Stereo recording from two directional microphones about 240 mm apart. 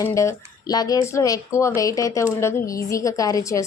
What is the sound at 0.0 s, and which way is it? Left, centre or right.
Speech, centre.